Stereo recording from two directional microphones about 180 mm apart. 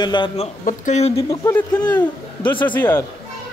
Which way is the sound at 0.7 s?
40° left (ahead or behind).